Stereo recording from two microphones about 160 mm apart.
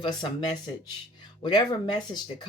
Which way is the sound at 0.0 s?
30° left (ahead or behind).